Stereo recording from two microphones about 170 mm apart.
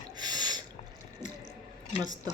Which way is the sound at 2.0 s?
20° right (ahead or behind).